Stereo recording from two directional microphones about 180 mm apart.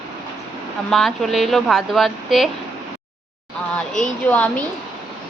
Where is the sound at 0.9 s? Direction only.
Centre (ahead or behind).